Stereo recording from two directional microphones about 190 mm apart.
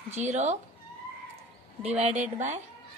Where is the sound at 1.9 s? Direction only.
35° right (ahead or behind).